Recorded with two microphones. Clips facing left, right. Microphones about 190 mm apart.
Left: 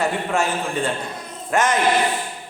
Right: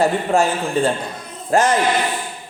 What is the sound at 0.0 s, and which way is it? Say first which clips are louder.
A man's voice: right 5 dB; 35° right (ahead or behind).